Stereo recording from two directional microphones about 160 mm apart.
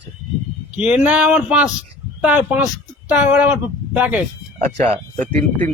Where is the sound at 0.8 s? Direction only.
10° right (ahead or behind).